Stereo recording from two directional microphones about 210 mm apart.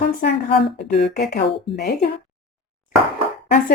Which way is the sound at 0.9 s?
45° left (ahead or behind).